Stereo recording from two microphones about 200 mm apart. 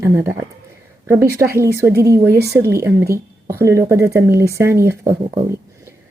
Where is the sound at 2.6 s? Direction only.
15° right (ahead or behind).